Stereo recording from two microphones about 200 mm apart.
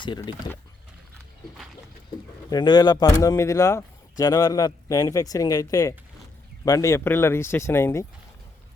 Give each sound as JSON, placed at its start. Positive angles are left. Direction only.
{"t": 0.0, "sound": "speech", "side_deg": 25}
{"t": 2.5, "sound": "speech", "side_deg": 20}